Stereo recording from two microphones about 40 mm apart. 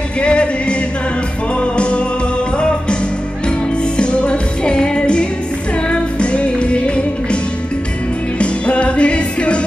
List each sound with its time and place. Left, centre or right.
0.2 s music: left
3.4 s music: left
8.4 s music: left